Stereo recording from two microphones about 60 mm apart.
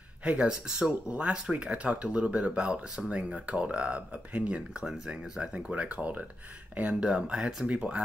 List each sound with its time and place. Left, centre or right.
0.2 s speech: centre
4.8 s speech: centre; by 7.1 s right
7.1 s speech: centre